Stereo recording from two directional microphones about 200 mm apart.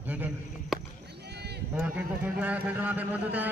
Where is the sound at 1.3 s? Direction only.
55° right (ahead or behind).